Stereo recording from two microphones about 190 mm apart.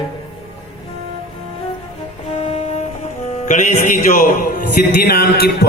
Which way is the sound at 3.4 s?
40° left (ahead or behind).